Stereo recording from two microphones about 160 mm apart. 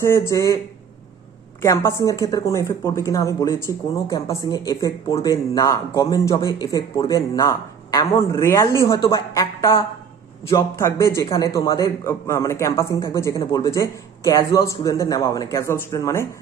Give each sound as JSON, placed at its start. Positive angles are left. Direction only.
{"t": 0.0, "sound": "a man's voice", "side_deg": 15}
{"t": 1.6, "sound": "a man's voice", "side_deg": 20}